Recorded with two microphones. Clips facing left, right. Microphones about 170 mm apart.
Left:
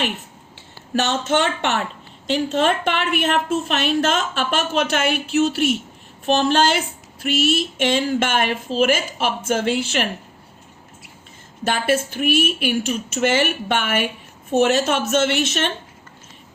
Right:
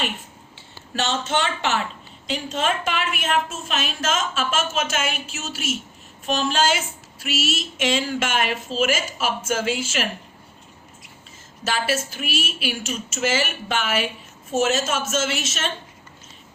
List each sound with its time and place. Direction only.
0.9 s a woman's voice: 60° left (ahead or behind)
11.6 s a woman's voice: 55° left (ahead or behind)